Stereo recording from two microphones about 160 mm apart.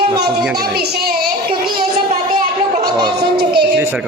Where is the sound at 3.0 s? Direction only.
85° right.